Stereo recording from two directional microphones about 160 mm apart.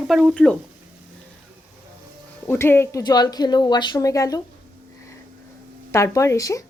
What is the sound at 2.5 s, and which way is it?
Speech, 15° left (ahead or behind).